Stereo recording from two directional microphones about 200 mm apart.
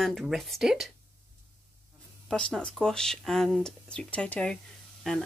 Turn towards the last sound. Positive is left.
turn(degrees=0)  # may be behind; listen again after turning